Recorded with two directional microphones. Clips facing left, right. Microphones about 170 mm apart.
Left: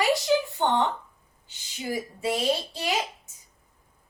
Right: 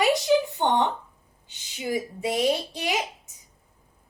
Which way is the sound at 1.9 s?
20° right (ahead or behind).